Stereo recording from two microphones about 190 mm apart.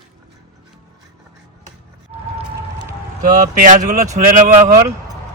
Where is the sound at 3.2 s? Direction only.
50° right (ahead or behind).